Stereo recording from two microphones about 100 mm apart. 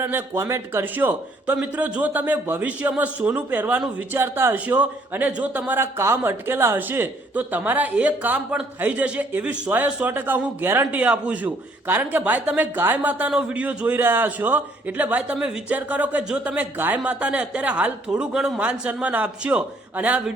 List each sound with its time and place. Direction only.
0.0 s a man's voice: 25° right (ahead or behind)